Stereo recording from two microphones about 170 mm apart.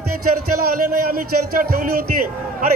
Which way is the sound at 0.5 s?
60° right (ahead or behind).